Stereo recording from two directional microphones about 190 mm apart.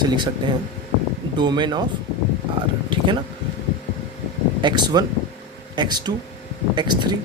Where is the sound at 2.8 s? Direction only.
25° right (ahead or behind).